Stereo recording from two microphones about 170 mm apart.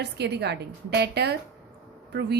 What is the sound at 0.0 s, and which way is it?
A woman's voice, 80° right.